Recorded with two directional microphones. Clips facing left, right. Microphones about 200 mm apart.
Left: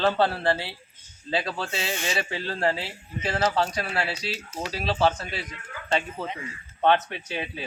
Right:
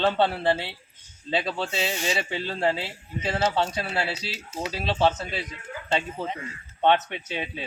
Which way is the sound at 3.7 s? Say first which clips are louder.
Even; 25° right (ahead or behind).